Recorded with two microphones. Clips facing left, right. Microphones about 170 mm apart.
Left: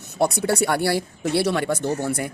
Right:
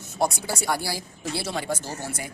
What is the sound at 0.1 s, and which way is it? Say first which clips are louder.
Speech: left 5 dB; 65° left (ahead or behind).